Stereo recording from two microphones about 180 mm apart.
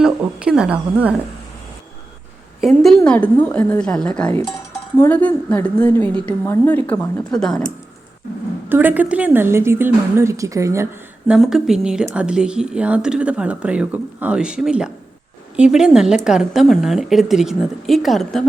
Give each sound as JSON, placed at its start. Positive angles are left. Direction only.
{"t": 0.0, "sound": "a woman's voice", "side_deg": -5}
{"t": 2.6, "sound": "a woman's voice", "side_deg": 0}
{"t": 8.7, "sound": "a woman's voice", "side_deg": -10}
{"t": 11.3, "sound": "speech", "side_deg": 0}